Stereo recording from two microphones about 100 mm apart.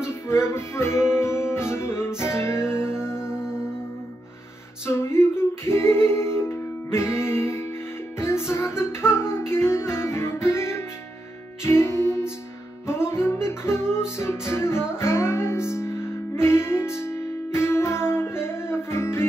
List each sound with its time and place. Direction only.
0.0 s music: 25° left (ahead or behind)
4.8 s music: 25° left (ahead or behind)